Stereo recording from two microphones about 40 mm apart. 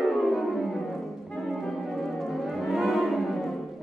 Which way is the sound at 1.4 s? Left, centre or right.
Centre.